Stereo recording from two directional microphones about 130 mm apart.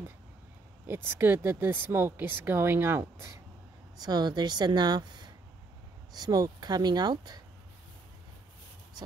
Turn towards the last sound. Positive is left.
turn(degrees=-30)  # may be behind; listen again after turning